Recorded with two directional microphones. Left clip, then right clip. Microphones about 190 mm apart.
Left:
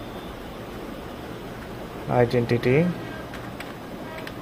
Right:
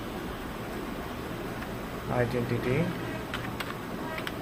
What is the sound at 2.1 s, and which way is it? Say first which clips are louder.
Speech: left 9 dB; 50° left (ahead or behind).